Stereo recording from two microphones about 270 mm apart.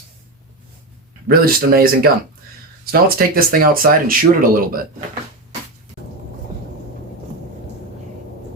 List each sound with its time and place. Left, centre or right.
1.3 s speech: right